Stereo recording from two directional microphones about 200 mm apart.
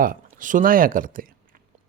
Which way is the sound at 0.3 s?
40° right (ahead or behind).